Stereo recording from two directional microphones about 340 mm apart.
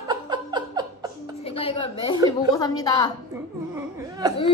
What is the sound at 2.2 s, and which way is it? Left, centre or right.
Speech, centre.